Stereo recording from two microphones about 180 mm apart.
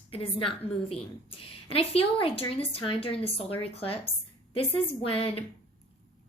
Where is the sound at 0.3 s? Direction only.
30° left (ahead or behind).